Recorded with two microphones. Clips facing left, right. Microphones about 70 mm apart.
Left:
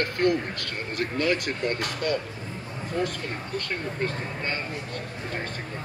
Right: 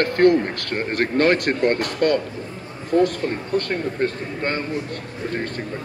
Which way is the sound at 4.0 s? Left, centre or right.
Right.